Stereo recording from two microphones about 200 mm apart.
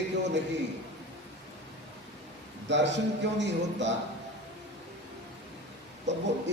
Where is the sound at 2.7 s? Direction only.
60° right (ahead or behind).